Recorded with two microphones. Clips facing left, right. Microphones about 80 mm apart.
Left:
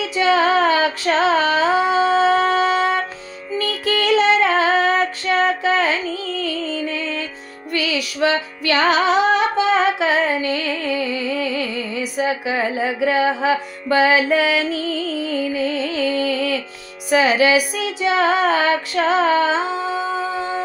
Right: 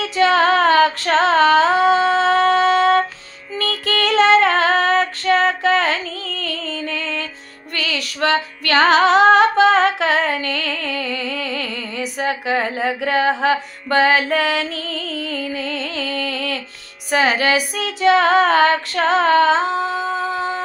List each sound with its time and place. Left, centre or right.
0.0 s female singing: right
3.8 s music: right